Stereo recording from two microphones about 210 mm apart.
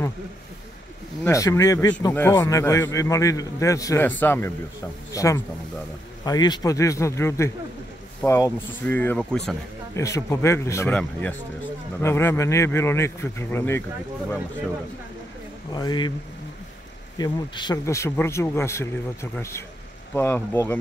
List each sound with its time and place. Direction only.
1.2 s a man's voice: 15° left (ahead or behind)
15.7 s speech: 20° left (ahead or behind)
17.2 s a man's voice: 20° left (ahead or behind)